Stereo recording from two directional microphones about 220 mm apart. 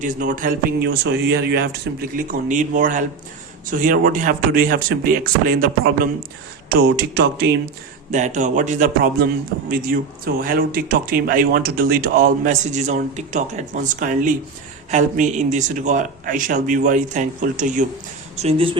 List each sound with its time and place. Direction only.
0.0 s speech: 35° right (ahead or behind)
8.1 s speech: 35° right (ahead or behind)
18.4 s speech: 25° right (ahead or behind)